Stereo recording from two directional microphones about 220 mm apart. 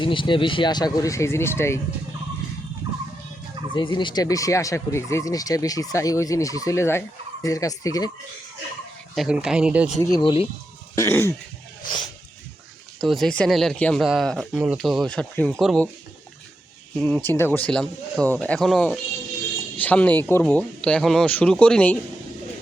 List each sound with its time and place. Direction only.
0.0 s speech: 20° left (ahead or behind)
3.8 s speech: 20° left (ahead or behind)
9.1 s speech: 5° right (ahead or behind)
10.0 s speech: 15° left (ahead or behind)
10.9 s speech: 15° left (ahead or behind)
13.0 s speech: centre (ahead or behind)
17.0 s speech: 5° left (ahead or behind)